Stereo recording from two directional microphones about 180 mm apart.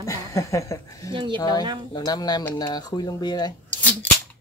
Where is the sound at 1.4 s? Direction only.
20° left (ahead or behind).